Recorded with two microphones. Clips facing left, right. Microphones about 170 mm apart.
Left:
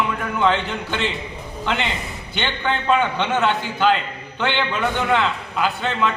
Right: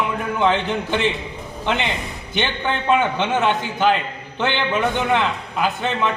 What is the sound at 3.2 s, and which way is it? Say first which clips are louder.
Speech: right 1 dB; 15° right (ahead or behind).